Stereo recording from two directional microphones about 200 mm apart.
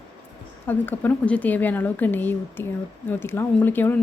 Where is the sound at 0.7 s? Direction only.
10° left (ahead or behind).